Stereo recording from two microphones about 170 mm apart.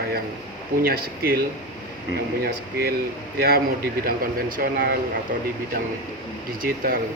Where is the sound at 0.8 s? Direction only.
60° right (ahead or behind).